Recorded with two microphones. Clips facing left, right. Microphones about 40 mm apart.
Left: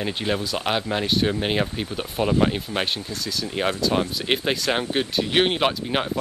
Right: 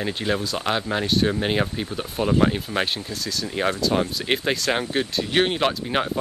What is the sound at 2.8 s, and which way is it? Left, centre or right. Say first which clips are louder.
Speech: right 1 dB; centre.